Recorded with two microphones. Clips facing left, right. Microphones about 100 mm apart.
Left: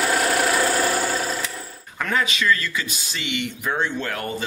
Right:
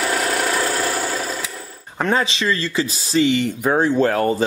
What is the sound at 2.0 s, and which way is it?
Speech, 30° right (ahead or behind).